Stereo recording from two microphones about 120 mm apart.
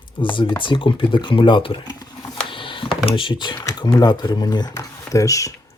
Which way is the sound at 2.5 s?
45° left (ahead or behind).